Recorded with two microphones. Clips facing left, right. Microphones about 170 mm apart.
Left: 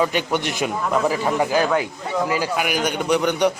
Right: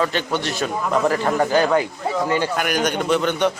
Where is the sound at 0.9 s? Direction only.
5° left (ahead or behind).